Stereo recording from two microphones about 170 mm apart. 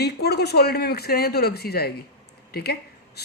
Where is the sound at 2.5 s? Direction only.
70° left (ahead or behind).